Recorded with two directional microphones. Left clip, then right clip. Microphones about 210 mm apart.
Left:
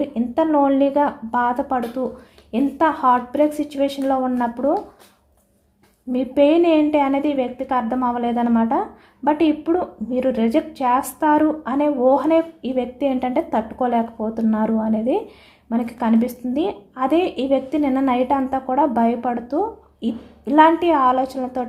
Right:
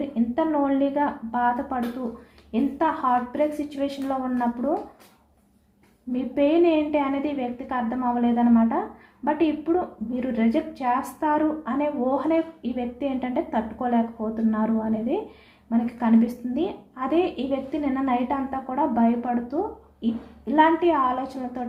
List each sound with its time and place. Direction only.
0.0 s a woman's voice: 45° left (ahead or behind)
6.1 s a woman's voice: 45° left (ahead or behind)